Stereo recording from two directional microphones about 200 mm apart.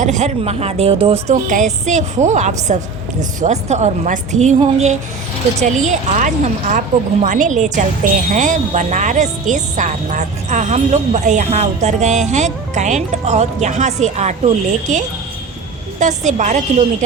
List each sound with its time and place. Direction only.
0.0 s speech: 35° right (ahead or behind)